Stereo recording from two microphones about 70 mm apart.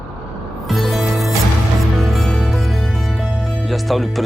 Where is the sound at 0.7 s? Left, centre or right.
Centre.